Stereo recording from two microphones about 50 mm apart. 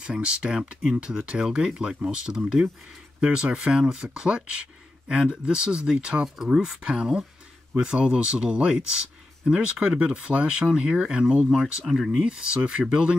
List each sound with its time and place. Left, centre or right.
0.0 s speech: right
6.2 s speech: centre
11.6 s speech: centre
12.1 s speech: centre